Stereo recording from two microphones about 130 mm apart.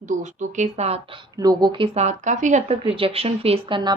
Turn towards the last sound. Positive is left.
turn(degrees=-40)  # may be behind; listen again after turning